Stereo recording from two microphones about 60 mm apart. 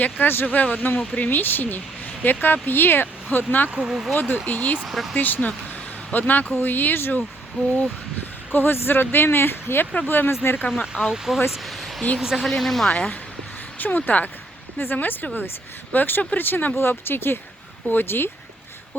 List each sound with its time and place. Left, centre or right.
0.0 s speech: left
3.7 s speech: centre
4.1 s speech: left
4.9 s speech: centre
5.1 s speech: left
8.5 s speech: left
11.0 s speech: centre
11.5 s a sound: centre
12.4 s speech: centre
12.9 s speech: centre
13.7 s speech: left